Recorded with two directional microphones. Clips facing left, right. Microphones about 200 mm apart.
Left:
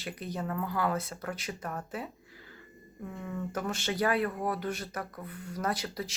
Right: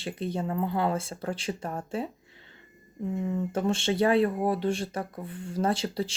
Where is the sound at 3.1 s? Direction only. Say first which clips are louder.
Right 8 dB; 25° right (ahead or behind).